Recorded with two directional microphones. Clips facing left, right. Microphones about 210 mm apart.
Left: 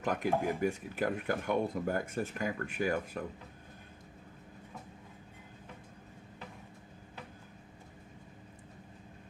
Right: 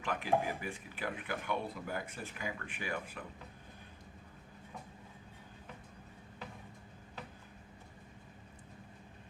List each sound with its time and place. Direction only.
0.0 s speech: 45° left (ahead or behind)